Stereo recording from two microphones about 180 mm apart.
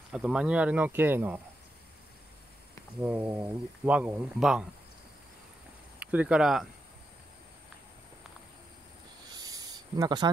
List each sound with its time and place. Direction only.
0.1 s speech: 5° right (ahead or behind)
3.0 s speech: 10° right (ahead or behind)
5.9 s speech: 5° right (ahead or behind)
9.3 s a sound: 20° right (ahead or behind)